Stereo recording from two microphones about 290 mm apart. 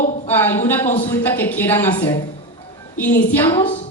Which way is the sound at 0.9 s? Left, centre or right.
Left.